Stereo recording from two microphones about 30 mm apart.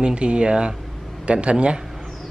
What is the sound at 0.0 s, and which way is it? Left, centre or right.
Speech, right.